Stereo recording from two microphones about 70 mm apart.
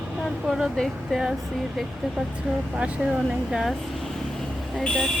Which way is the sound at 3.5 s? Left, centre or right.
Centre.